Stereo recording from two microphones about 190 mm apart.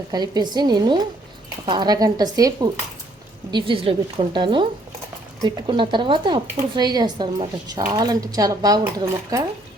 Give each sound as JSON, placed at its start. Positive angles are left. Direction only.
{"t": 0.1, "sound": "speech", "side_deg": -20}